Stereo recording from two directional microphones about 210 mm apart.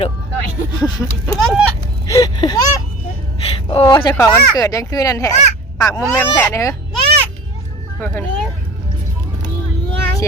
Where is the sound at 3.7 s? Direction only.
25° left (ahead or behind).